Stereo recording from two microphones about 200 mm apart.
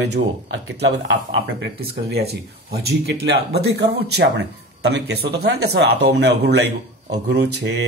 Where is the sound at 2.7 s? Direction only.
55° right (ahead or behind).